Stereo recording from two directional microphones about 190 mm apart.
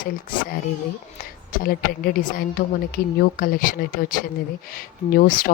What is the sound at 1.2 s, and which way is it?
A woman's voice, 50° left (ahead or behind).